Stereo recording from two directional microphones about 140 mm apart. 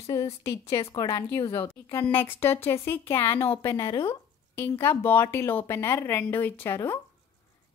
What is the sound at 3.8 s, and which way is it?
Speech, 35° left (ahead or behind).